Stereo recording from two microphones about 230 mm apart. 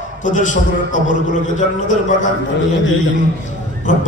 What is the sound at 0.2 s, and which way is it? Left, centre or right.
Speech, left.